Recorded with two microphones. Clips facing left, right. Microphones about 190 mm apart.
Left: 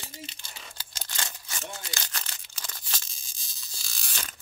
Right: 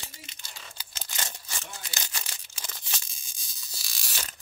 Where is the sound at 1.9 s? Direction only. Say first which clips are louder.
Left 1 dB; 15° right (ahead or behind).